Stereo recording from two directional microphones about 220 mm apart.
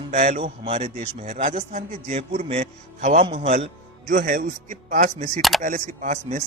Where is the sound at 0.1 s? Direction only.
35° right (ahead or behind).